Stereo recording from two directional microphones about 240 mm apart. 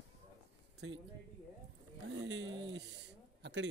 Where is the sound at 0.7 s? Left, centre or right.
Right.